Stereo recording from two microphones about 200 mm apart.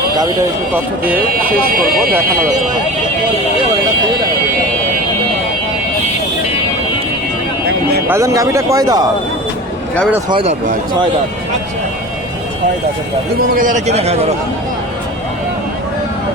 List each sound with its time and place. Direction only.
8.0 s speech: 15° right (ahead or behind)
10.2 s speech: 25° right (ahead or behind)
13.6 s a man's voice: 40° right (ahead or behind)